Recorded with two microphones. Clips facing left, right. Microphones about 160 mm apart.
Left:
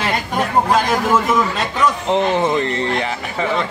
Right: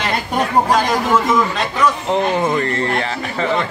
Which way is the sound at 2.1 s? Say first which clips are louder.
Left 1 dB; 20° left (ahead or behind).